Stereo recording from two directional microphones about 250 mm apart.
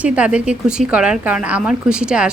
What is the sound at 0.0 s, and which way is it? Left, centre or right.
A woman's voice, centre.